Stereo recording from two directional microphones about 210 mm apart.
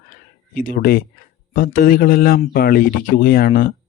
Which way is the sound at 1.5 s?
40° left (ahead or behind).